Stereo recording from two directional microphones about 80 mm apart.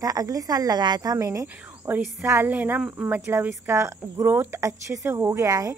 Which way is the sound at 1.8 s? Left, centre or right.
Right.